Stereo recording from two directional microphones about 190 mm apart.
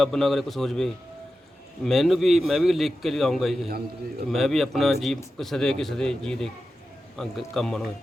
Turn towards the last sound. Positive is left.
turn(degrees=0)  # may be behind; listen again after turning